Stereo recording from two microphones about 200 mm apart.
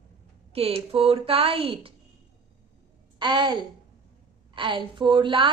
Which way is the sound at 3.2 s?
20° right (ahead or behind).